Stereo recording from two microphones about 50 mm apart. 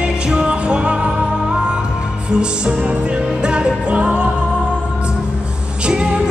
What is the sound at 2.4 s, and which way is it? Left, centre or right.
Music, right.